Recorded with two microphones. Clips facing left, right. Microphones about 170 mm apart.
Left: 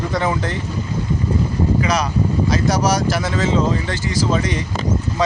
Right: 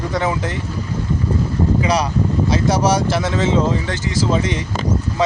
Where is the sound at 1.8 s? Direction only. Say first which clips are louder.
Right 1 dB; 30° right (ahead or behind).